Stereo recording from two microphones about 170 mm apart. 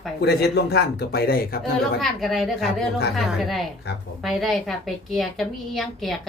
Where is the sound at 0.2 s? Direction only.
75° left (ahead or behind).